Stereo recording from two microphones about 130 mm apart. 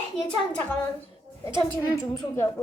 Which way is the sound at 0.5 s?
10° left (ahead or behind).